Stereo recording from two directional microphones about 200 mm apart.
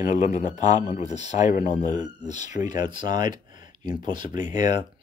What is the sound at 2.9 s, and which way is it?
Speech, 25° right (ahead or behind).